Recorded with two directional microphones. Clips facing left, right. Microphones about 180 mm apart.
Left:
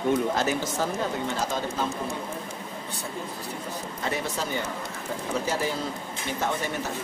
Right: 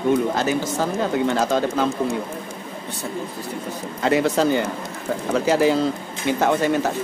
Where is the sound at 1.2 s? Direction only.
80° right.